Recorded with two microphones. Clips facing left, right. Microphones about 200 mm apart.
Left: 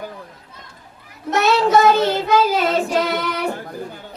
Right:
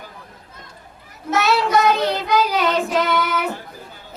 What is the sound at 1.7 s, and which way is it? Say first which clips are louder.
Child singing: left 3 dB; 30° left (ahead or behind).